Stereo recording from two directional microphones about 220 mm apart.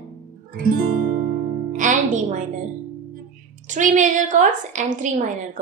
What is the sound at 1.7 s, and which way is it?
Music, 35° right (ahead or behind).